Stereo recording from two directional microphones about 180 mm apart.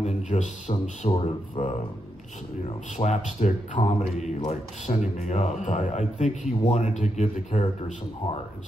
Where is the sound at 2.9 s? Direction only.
35° left (ahead or behind).